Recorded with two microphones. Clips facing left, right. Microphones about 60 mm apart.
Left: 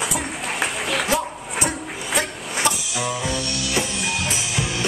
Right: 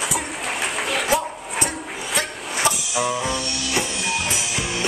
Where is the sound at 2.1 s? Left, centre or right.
Centre.